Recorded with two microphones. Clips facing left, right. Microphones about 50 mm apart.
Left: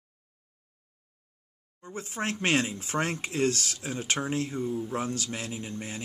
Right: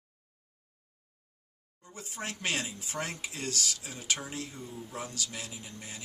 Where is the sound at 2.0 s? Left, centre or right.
Left.